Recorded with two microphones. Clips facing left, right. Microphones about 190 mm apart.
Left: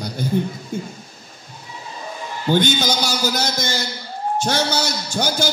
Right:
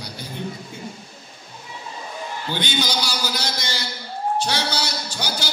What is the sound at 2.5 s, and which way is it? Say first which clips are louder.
A man's voice: left 8 dB; 45° left (ahead or behind).